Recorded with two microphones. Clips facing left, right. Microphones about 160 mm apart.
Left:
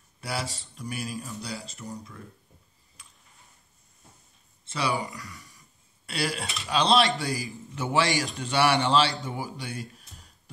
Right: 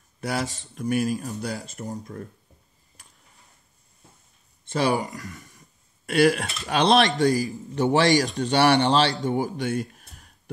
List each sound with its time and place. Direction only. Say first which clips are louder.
0.2 s speech: right 5 dB; 45° right (ahead or behind)
4.7 s speech: right 6 dB; 45° right (ahead or behind)
9.2 s a sound: right 10 dB; 40° right (ahead or behind)